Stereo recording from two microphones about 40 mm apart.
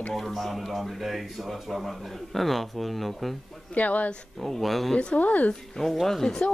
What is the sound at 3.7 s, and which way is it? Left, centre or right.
Speech, left.